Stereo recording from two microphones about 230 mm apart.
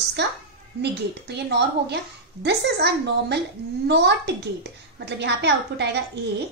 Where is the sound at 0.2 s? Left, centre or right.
Right.